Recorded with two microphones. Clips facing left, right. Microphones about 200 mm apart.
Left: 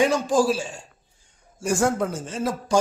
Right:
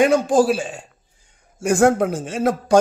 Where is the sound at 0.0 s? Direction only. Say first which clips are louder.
Right 5 dB; 55° right (ahead or behind).